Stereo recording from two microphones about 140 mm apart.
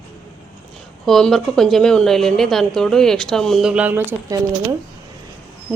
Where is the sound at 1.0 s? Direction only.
Centre (ahead or behind); by 4.3 s 15° right (ahead or behind).